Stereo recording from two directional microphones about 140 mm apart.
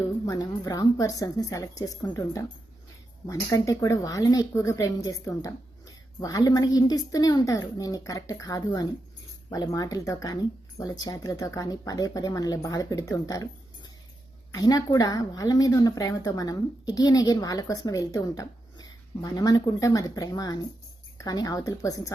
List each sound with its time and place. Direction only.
0.3 s a woman's voice: 25° left (ahead or behind)